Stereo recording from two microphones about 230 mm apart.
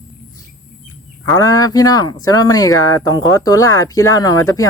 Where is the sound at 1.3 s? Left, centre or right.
Centre.